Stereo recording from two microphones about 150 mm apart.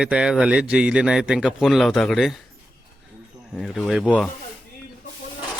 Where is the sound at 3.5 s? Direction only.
Centre (ahead or behind).